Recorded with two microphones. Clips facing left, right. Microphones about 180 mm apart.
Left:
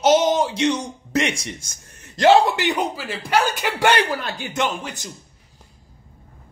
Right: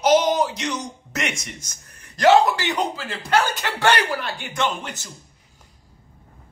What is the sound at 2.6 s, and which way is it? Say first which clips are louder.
Speech: left 2 dB; 10° left (ahead or behind).